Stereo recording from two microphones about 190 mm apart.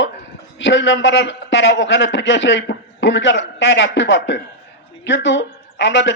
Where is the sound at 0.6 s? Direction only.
75° left (ahead or behind).